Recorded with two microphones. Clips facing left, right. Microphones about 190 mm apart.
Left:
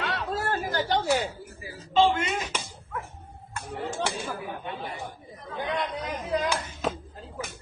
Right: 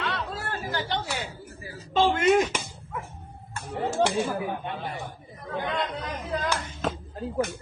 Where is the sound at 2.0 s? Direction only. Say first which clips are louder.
Right 1 dB; 55° right (ahead or behind).